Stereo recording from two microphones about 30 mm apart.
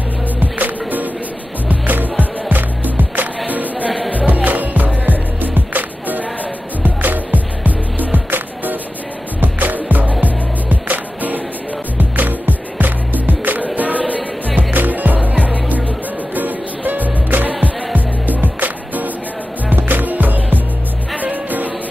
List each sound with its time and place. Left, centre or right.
0.4 s music: right
6.8 s music: right
12.0 s music: right
13.7 s music: right
14.7 s music: right
16.3 s music: right
17.5 s music: right
18.2 s music: right
19.7 s music: right
21.2 s music: right